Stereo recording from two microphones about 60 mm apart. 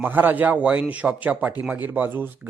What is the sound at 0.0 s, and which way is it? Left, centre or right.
Speech, right.